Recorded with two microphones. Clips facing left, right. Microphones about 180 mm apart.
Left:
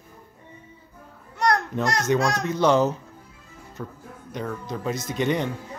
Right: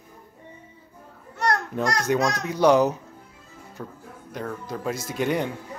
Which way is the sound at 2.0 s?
10° right (ahead or behind).